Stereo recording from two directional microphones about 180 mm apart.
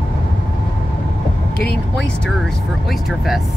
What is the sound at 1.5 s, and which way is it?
Speech, 60° left (ahead or behind).